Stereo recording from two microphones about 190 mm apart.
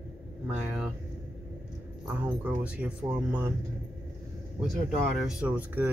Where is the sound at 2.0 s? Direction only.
10° right (ahead or behind).